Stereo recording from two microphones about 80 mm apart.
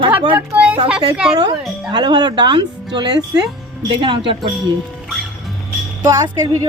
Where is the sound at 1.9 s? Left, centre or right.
Right.